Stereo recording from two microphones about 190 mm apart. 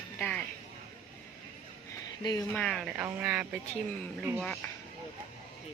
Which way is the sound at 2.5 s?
5° left (ahead or behind).